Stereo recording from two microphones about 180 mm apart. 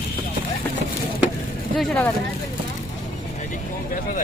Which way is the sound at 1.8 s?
5° left (ahead or behind).